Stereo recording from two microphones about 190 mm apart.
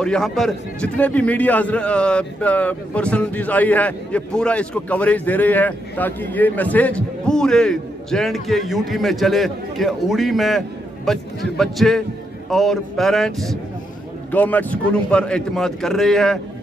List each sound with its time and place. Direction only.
0.0 s a man's voice: 5° left (ahead or behind)